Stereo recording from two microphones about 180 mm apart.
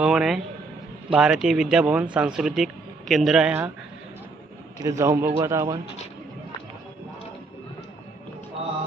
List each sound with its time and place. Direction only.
0.0 s speech: 5° right (ahead or behind)
4.7 s a man's voice: 15° right (ahead or behind)